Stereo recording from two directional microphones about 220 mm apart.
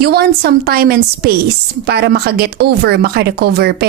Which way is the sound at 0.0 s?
45° right (ahead or behind).